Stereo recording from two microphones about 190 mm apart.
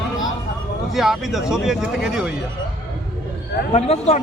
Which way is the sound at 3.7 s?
35° left (ahead or behind).